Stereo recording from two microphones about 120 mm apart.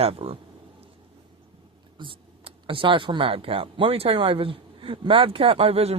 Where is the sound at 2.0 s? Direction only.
45° right (ahead or behind).